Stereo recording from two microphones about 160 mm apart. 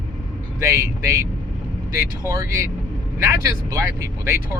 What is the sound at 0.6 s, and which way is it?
Speech, 20° right (ahead or behind).